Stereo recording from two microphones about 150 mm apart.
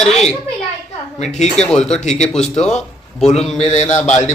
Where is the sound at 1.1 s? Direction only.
45° left (ahead or behind).